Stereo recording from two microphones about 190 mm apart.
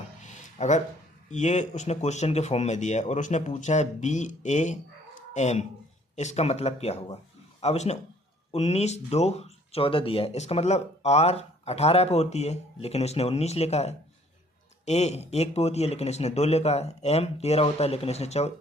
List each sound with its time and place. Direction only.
0.6 s speech: 40° left (ahead or behind)